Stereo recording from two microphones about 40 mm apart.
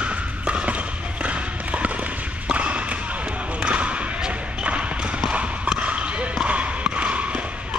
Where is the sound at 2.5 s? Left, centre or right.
Right.